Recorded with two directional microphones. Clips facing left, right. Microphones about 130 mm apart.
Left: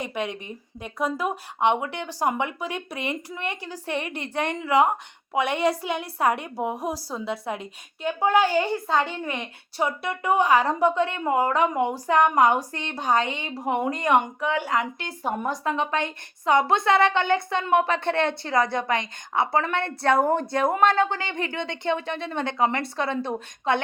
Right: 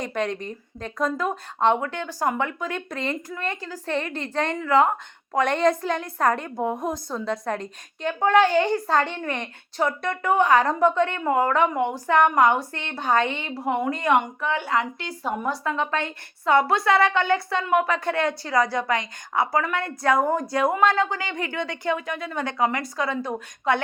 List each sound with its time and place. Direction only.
0.0 s a woman's voice: 10° left (ahead or behind); by 23.8 s 25° left (ahead or behind)